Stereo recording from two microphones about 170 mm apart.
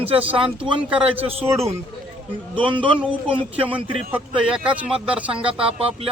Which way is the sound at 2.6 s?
30° right (ahead or behind).